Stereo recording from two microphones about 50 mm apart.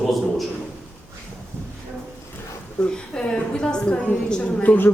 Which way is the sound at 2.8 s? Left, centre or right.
Centre.